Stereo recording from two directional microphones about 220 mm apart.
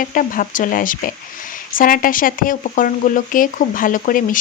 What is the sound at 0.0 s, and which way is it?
Speech, 40° left (ahead or behind).